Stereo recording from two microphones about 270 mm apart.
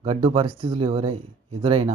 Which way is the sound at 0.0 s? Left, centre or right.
Centre.